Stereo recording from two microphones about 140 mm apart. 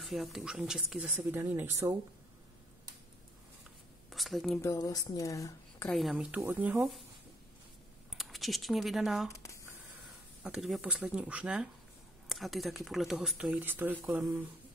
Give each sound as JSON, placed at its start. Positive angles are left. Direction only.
{"t": 0.0, "sound": "speech", "side_deg": 0}
{"t": 4.1, "sound": "a woman's voice", "side_deg": 0}
{"t": 4.6, "sound": "a woman's voice", "side_deg": 20}
{"t": 5.9, "sound": "speech", "side_deg": 0}
{"t": 6.4, "sound": "speech", "side_deg": -15}
{"t": 8.1, "sound": "speech", "side_deg": 0}
{"t": 9.3, "sound": "a sound", "side_deg": 20}
{"t": 10.4, "sound": "speech", "side_deg": 0}
{"t": 13.6, "sound": "speech", "side_deg": -15}